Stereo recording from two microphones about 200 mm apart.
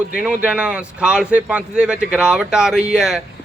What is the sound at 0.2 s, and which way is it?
A man's voice, 5° right (ahead or behind).